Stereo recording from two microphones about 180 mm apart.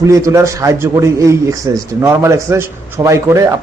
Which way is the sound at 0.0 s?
15° right (ahead or behind).